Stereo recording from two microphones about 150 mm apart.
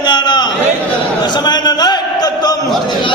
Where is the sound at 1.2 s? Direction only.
30° left (ahead or behind).